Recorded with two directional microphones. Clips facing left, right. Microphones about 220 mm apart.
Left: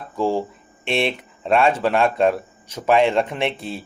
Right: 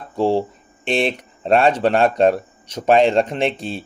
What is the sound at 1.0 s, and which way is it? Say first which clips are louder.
Speech: right 2 dB; 35° right (ahead or behind).